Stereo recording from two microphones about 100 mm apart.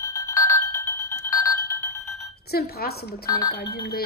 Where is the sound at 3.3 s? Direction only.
40° left (ahead or behind).